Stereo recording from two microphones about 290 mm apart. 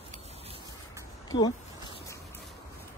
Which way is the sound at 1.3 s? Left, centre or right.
Centre.